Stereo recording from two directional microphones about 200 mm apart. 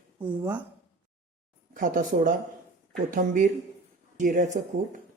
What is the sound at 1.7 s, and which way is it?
Speech, 45° right (ahead or behind).